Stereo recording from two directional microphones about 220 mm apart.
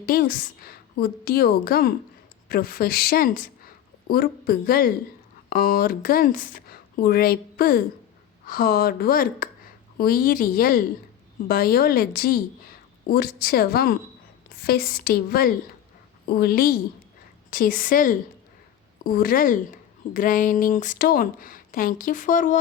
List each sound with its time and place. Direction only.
0.0 s a woman's voice: 40° left (ahead or behind)